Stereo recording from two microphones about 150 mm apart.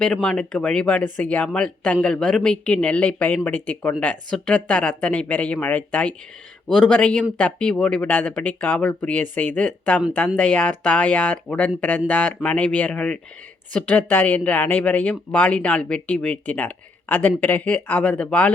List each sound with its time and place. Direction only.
0.0 s speech: 5° left (ahead or behind)